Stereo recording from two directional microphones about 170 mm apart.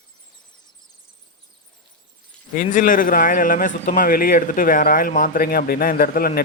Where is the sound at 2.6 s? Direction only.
50° left (ahead or behind).